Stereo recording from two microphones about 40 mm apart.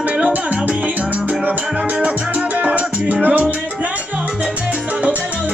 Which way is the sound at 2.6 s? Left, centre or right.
Right.